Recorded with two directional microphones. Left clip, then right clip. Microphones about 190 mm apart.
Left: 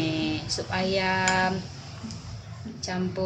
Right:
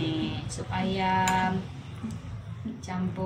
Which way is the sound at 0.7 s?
70° left (ahead or behind).